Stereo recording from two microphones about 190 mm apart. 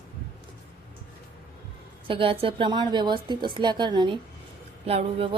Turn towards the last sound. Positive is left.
turn(degrees=-30)  # may be behind; listen again after turning